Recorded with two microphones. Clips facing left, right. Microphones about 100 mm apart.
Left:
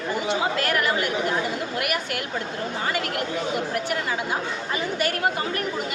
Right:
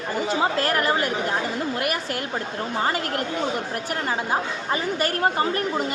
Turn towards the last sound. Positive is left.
turn(degrees=-35)  # may be behind; listen again after turning